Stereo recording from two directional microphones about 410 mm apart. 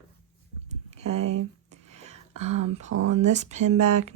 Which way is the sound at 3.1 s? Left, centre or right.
Centre.